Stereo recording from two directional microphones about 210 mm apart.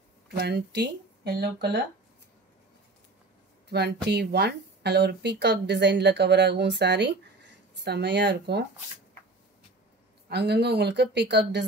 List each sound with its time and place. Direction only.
0.4 s speech: 50° right (ahead or behind)
3.6 s a woman's voice: 50° right (ahead or behind)
10.3 s speech: 50° right (ahead or behind)